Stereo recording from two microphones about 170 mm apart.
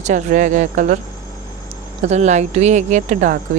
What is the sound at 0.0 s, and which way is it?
Speech, 45° right (ahead or behind).